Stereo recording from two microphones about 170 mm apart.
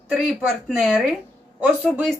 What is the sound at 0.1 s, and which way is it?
Speech, centre (ahead or behind).